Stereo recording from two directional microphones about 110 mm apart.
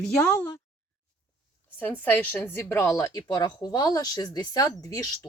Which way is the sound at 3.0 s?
35° left (ahead or behind).